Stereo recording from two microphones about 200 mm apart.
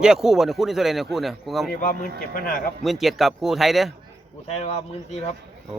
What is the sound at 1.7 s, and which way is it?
Speech, 45° left (ahead or behind).